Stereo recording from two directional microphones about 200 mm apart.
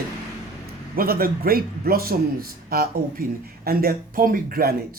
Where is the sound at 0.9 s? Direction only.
50° right (ahead or behind).